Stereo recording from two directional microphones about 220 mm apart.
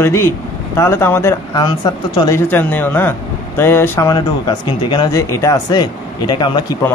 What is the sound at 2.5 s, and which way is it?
Speech, 10° left (ahead or behind).